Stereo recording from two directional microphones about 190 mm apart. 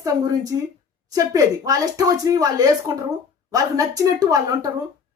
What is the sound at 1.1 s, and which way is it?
A woman's voice, 20° right (ahead or behind).